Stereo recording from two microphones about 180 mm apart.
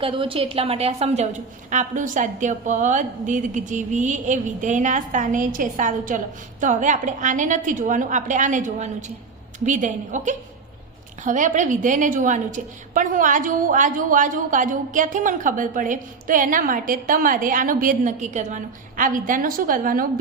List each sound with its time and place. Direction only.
0.0 s a woman's voice: 30° right (ahead or behind); by 20.1 s 50° right (ahead or behind)